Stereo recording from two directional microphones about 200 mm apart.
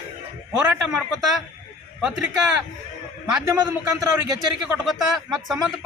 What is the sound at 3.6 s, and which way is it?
Speech, 15° right (ahead or behind).